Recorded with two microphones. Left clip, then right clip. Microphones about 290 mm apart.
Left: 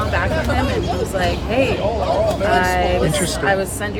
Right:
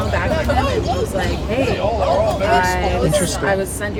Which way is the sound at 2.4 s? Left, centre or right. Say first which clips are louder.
Right 1 dB; right.